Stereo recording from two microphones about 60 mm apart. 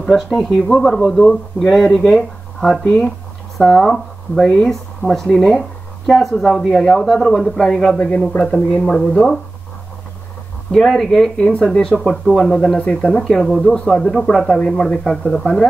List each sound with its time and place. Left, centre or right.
0.1 s speech: centre
8.3 s speech: centre
10.7 s speech: centre
12.0 s speech: centre
13.2 s speech: centre
13.6 s speech: centre